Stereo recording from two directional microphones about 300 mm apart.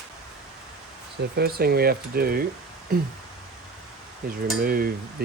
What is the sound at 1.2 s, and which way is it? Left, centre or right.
Speech, right.